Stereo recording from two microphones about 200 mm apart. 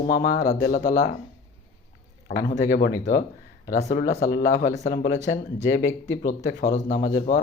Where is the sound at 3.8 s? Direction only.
20° left (ahead or behind).